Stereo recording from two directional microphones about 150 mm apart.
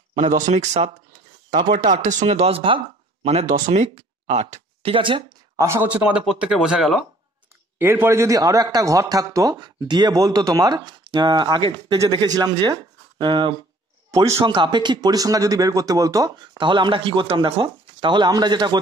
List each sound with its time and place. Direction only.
0.4 s speech: 50° right (ahead or behind)
1.5 s speech: 35° right (ahead or behind)
1.8 s speech: 55° right (ahead or behind); by 5.2 s 35° right (ahead or behind)
5.6 s speech: 15° right (ahead or behind)
6.0 s speech: 5° right (ahead or behind)
7.8 s a man's voice: 15° right (ahead or behind); by 13.6 s 30° right (ahead or behind)
14.1 s a man's voice: 20° right (ahead or behind)
14.4 s a man's voice: 30° right (ahead or behind)